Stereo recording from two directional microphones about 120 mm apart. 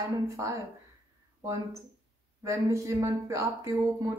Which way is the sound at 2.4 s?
25° right (ahead or behind).